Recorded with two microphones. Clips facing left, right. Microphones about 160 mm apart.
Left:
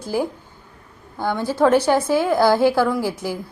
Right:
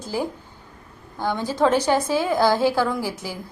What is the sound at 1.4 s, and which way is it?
Speech, 10° left (ahead or behind).